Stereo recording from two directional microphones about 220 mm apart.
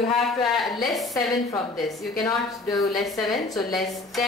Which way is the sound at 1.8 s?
Centre (ahead or behind).